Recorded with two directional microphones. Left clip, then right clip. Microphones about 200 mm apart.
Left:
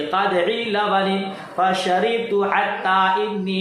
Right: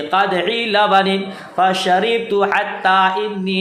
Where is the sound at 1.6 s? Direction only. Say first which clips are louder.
Right 4 dB; 40° right (ahead or behind).